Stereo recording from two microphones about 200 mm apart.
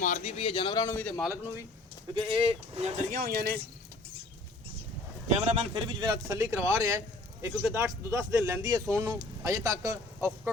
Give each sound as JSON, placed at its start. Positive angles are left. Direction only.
{"t": 0.0, "sound": "a man's voice", "side_deg": 35}
{"t": 2.1, "sound": "speech", "side_deg": -30}
{"t": 3.2, "sound": "speech", "side_deg": -50}
{"t": 5.3, "sound": "a man's voice", "side_deg": -30}